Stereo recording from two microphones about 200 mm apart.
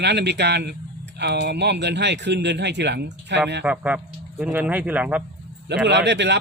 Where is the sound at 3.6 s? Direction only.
5° right (ahead or behind).